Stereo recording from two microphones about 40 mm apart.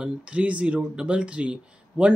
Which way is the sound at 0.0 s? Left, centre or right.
Right.